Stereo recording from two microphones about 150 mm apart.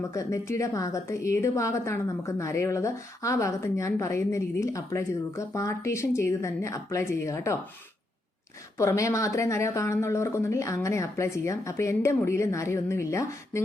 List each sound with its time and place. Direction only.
0.1 s a woman's voice: 20° left (ahead or behind)
8.8 s a woman's voice: 20° left (ahead or behind)